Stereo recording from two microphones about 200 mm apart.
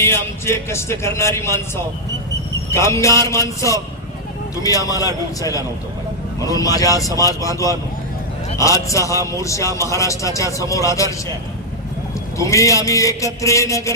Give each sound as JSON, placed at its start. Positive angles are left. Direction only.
{"t": 0.0, "sound": "a man's voice", "side_deg": 10}
{"t": 4.7, "sound": "a man's voice", "side_deg": 20}
{"t": 12.4, "sound": "a man's voice", "side_deg": 15}